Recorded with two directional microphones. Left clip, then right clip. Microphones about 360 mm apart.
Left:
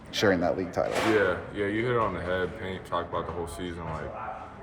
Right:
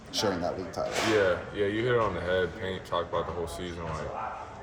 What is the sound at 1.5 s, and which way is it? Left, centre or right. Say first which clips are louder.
Speech: right 1 dB; centre.